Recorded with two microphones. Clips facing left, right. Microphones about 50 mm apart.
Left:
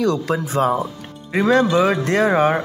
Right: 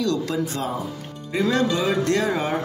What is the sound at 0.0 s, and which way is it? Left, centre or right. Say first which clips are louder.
Speech: left 4 dB; left.